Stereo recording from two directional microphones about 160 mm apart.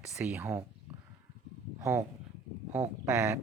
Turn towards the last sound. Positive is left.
turn(degrees=-15)  # may be behind; listen again after turning